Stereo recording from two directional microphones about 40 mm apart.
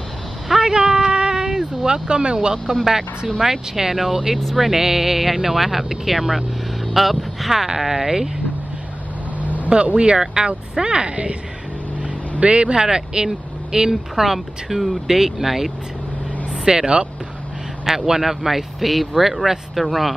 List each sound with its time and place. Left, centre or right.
0.7 s a sound: centre
1.9 s speech: right
4.4 s speech: centre
4.6 s speech: centre
9.4 s vehicle: right
9.8 s speech: right
12.0 s vehicle: right
12.8 s speech: centre
16.6 s speech: centre